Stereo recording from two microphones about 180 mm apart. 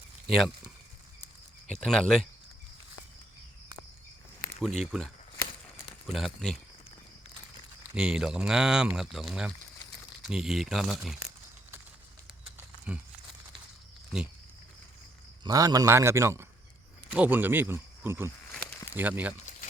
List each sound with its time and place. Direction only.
0.3 s speech: centre (ahead or behind)
1.6 s speech: 5° left (ahead or behind)
4.8 s speech: centre (ahead or behind)
6.1 s speech: centre (ahead or behind)
7.9 s speech: 5° right (ahead or behind)
15.4 s speech: 20° right (ahead or behind)